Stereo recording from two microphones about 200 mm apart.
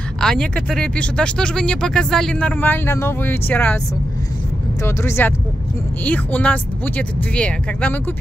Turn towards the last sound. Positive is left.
turn(degrees=5)  # may be behind; listen again after turning